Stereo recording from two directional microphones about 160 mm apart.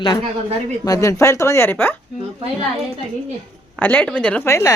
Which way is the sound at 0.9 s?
20° left (ahead or behind).